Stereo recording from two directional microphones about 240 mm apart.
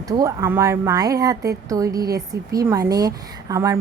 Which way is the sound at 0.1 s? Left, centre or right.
Centre.